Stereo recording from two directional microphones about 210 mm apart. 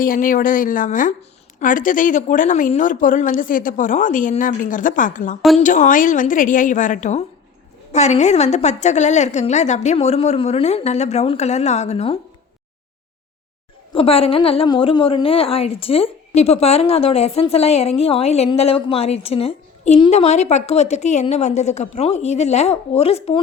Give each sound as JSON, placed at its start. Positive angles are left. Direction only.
{"t": 0.0, "sound": "a woman's voice", "side_deg": 40}
{"t": 13.9, "sound": "a woman's voice", "side_deg": 25}